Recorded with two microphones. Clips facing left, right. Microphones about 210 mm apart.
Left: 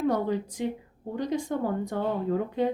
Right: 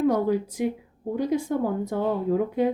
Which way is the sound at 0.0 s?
10° right (ahead or behind).